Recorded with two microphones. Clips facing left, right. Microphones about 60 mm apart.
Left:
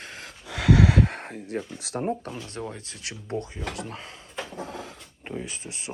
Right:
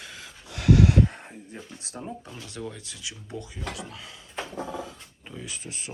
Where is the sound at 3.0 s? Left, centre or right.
Left.